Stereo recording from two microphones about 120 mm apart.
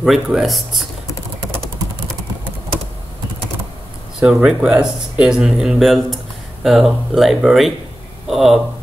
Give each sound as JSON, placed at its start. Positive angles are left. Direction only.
{"t": 0.0, "sound": "speech", "side_deg": -5}
{"t": 4.2, "sound": "speech", "side_deg": -5}